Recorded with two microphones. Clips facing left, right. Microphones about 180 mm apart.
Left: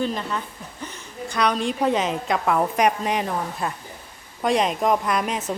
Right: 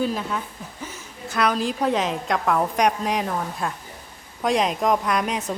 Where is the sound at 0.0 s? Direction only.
5° right (ahead or behind).